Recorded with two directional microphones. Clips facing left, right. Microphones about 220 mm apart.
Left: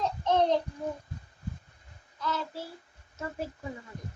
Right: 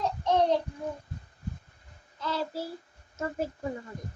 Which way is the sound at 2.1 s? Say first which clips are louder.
Right 2 dB; 30° right (ahead or behind).